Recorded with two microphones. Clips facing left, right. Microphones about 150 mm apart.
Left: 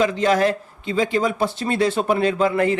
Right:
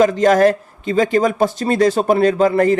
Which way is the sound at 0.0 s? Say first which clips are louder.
Right 6 dB; 45° right (ahead or behind).